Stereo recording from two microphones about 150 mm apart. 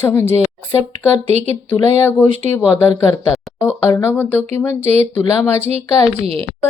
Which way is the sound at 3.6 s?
15° left (ahead or behind).